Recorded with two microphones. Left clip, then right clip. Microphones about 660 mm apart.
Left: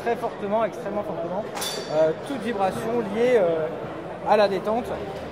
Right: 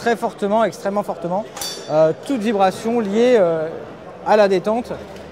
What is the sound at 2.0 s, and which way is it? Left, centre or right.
Speech, right.